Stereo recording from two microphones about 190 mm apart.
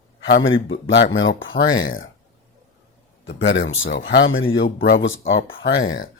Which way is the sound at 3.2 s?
75° left (ahead or behind).